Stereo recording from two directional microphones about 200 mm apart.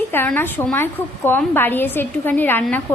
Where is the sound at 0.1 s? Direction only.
10° left (ahead or behind).